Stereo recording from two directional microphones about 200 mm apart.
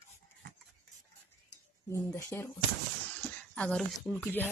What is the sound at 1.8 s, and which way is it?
Speech, 15° left (ahead or behind).